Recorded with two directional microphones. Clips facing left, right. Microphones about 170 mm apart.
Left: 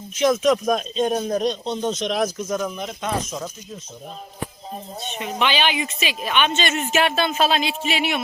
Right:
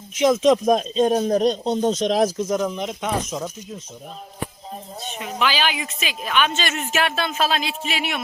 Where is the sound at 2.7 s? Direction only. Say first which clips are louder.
Right 1 dB; 15° right (ahead or behind).